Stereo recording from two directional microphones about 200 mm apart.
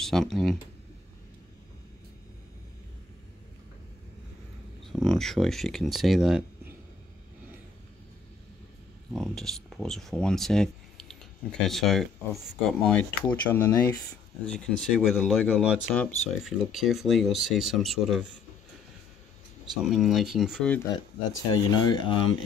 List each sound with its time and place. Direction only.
0.0 s speech: centre (ahead or behind)
4.9 s speech: centre (ahead or behind)
9.1 s speech: centre (ahead or behind)
19.6 s speech: centre (ahead or behind)
21.5 s speech: 20° left (ahead or behind)